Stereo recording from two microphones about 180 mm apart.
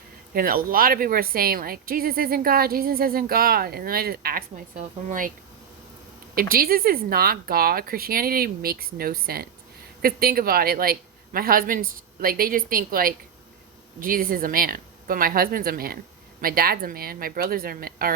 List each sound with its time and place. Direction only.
0.3 s speech: 55° right (ahead or behind)
6.3 s a man's voice: 55° right (ahead or behind)